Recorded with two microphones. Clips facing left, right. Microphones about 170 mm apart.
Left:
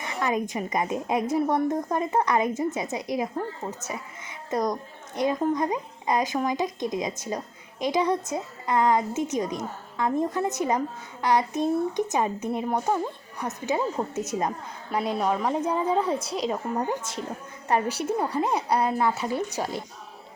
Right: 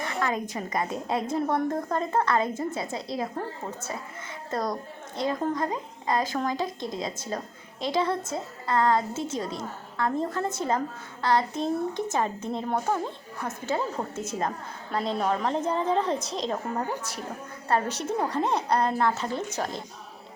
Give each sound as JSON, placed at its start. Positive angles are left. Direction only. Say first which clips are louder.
{"t": 0.0, "sound": "a woman's voice", "louder": "left 2 dB", "side_deg": 15}